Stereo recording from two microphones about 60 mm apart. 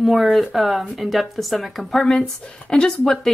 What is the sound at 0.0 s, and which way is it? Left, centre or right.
Speech, centre.